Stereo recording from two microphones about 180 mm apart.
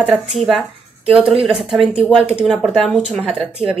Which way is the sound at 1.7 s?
5° right (ahead or behind).